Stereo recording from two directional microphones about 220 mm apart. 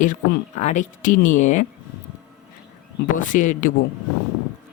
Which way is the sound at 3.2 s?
35° left (ahead or behind).